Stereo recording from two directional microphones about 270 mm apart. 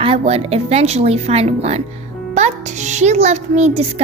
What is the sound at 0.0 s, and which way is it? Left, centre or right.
A child's voice, right.